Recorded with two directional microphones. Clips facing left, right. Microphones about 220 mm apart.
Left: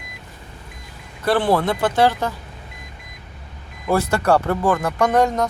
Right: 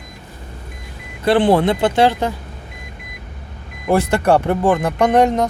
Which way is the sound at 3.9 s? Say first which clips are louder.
Right 3 dB; 15° right (ahead or behind).